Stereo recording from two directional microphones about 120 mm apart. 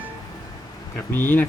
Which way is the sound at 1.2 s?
15° left (ahead or behind).